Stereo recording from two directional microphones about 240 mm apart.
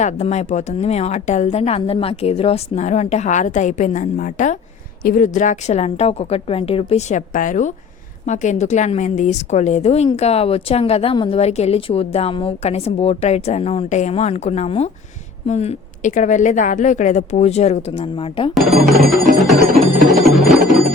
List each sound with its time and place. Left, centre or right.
0.0 s a woman's voice: left
18.5 s music: centre